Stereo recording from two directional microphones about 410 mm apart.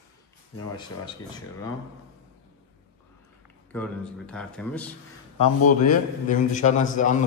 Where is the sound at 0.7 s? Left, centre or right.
Centre.